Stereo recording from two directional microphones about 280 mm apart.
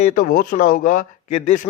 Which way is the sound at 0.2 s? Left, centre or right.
Left.